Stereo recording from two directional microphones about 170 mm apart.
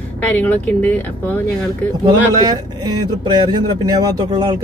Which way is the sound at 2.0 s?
25° right (ahead or behind).